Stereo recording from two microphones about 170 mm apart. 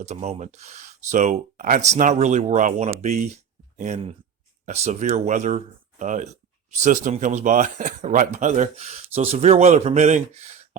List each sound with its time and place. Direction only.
0.0 s speech: 40° right (ahead or behind)